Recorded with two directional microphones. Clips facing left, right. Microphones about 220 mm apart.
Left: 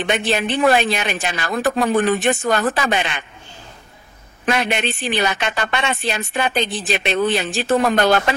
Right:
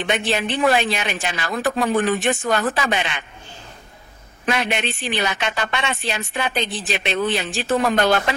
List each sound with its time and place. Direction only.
0.0 s speech: 45° left (ahead or behind)
4.5 s speech: 45° left (ahead or behind)